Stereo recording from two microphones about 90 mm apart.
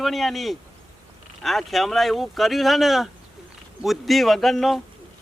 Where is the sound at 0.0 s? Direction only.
Centre (ahead or behind).